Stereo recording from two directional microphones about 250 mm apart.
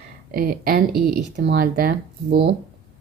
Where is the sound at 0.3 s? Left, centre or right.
Right.